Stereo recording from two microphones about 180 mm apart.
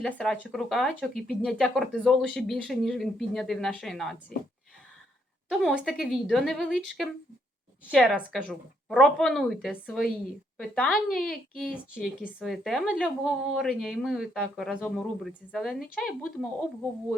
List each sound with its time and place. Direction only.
0.0 s speech: 5° left (ahead or behind)
5.5 s speech: centre (ahead or behind)